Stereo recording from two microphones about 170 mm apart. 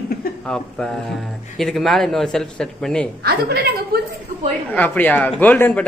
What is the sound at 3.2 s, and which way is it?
Speech, 70° right (ahead or behind).